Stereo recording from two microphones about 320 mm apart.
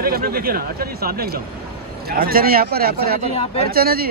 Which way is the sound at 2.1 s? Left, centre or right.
Right.